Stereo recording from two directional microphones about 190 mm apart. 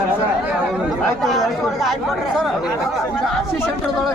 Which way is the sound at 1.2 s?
Centre (ahead or behind).